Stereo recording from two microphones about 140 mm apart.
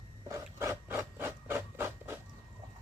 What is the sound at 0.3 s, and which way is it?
Rub, 20° right (ahead or behind).